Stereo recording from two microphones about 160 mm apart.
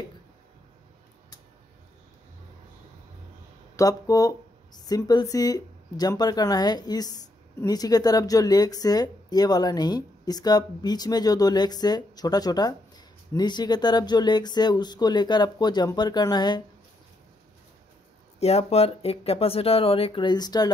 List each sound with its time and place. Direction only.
3.7 s speech: 20° left (ahead or behind)
18.4 s speech: 40° left (ahead or behind); by 20.7 s 25° left (ahead or behind)